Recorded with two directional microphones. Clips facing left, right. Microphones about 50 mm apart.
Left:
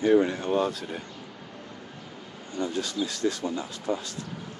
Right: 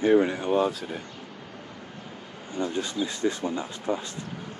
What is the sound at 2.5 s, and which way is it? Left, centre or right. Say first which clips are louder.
Speech: right 1 dB; right.